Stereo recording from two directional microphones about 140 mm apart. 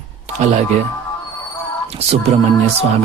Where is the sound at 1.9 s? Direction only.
50° right (ahead or behind).